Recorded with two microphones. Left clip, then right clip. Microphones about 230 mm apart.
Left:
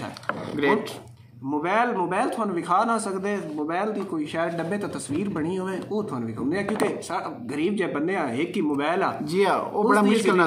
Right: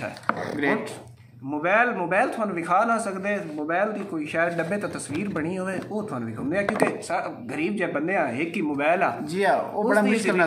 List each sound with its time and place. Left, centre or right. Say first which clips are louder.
1.6 s a man's voice: right 2 dB; centre
7.1 s a man's voice: right 2 dB; centre
9.3 s speech: left 3 dB; centre